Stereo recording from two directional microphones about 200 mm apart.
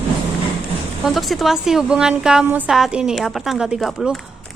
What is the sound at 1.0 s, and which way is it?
A woman's voice, centre (ahead or behind).